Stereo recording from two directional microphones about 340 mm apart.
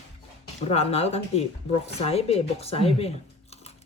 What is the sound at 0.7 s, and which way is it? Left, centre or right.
A woman's voice, centre.